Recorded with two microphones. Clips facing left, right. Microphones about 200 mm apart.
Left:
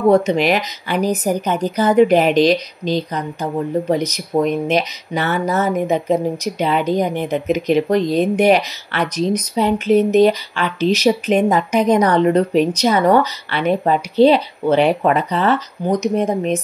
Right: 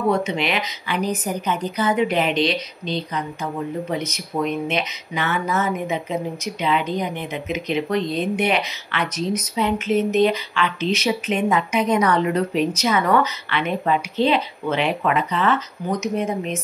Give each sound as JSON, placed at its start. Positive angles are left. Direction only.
{"t": 0.1, "sound": "speech", "side_deg": 40}